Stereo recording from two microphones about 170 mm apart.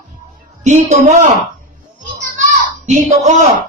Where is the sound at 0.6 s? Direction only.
45° right (ahead or behind).